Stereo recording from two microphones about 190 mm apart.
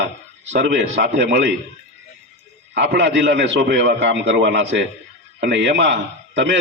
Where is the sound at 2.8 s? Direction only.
70° right (ahead or behind).